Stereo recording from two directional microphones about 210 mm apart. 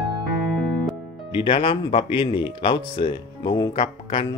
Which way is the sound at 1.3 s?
25° left (ahead or behind).